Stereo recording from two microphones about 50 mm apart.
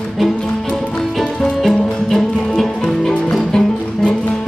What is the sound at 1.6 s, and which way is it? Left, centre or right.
Music, centre.